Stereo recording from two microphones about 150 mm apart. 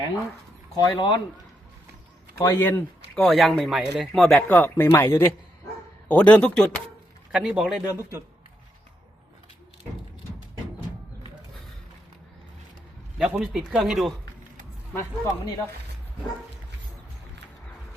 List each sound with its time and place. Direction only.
0.8 s speech: 30° left (ahead or behind)
2.4 s speech: 15° left (ahead or behind)
3.2 s speech: centre (ahead or behind)
4.4 s speech: 15° left (ahead or behind)
7.3 s speech: 5° right (ahead or behind)
13.1 s speech: 5° right (ahead or behind)
14.9 s speech: 20° left (ahead or behind)